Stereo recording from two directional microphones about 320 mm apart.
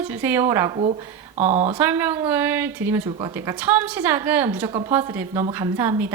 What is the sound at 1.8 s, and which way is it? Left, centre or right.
A woman's voice, centre.